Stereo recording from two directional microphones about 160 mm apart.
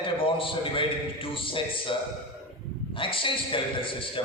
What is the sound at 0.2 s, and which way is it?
A man's voice, 35° left (ahead or behind).